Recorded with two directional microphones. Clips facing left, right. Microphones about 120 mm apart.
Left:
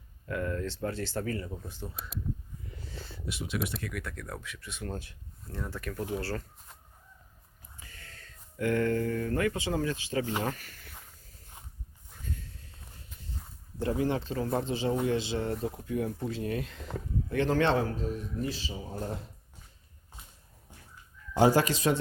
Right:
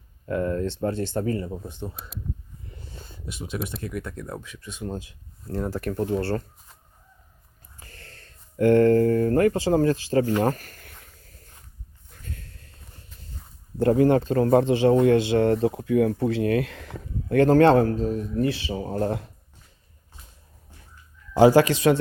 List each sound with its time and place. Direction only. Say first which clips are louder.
0.3 s speech: right 8 dB; 30° right (ahead or behind)
3.8 s speech: right 6 dB; 30° right (ahead or behind)
5.5 s a man's voice: right 10 dB; 40° right (ahead or behind)
8.5 s speech: right 11 dB; 35° right (ahead or behind)
10.4 s a sound: right 10 dB; 45° right (ahead or behind); by 12.7 s 65° right (ahead or behind)
13.7 s speech: right 11 dB; 55° right (ahead or behind); by 17.3 s 75° right (ahead or behind)
17.3 s a man's voice: right 10 dB; 45° right (ahead or behind)
18.3 s speech: right 10 dB; 65° right (ahead or behind)
21.3 s speech: right 8 dB; 90° right; by 22.0 s 75° right (ahead or behind)